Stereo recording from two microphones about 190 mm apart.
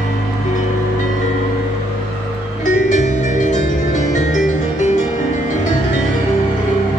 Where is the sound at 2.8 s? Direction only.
40° left (ahead or behind).